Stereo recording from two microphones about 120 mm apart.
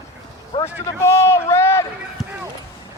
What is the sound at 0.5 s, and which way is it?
Speech, 40° left (ahead or behind).